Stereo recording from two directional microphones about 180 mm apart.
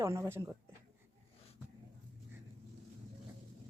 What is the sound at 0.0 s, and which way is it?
Speech, 15° right (ahead or behind).